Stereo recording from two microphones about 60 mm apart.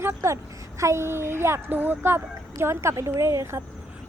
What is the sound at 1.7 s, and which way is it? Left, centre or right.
Speech, right.